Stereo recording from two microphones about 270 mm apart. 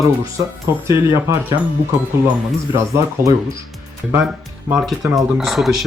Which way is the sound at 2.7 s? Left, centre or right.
Centre.